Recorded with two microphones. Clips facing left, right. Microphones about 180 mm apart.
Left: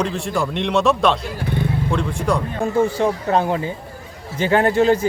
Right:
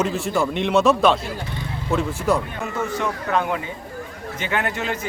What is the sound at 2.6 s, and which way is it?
Speech, 30° left (ahead or behind).